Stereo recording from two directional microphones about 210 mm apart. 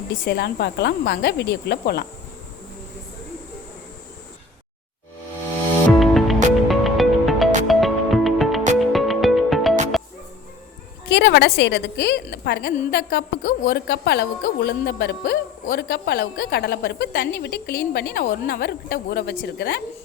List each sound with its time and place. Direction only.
0.3 s a woman's voice: 50° left (ahead or behind)
5.9 s music: centre (ahead or behind)
11.1 s a woman's voice: 55° left (ahead or behind)